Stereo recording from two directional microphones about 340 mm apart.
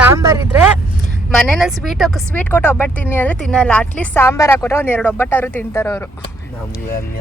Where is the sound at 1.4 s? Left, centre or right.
Centre.